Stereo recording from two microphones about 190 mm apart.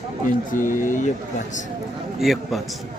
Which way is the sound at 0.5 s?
45° left (ahead or behind).